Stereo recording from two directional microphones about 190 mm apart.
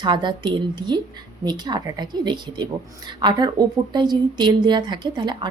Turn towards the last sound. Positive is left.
turn(degrees=-25)  # may be behind; listen again after turning